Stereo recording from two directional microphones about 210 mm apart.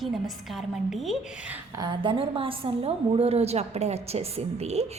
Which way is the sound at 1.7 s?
20° right (ahead or behind).